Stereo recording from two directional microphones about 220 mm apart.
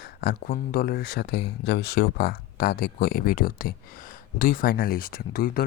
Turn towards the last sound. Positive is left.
turn(degrees=40)  # may be behind; listen again after turning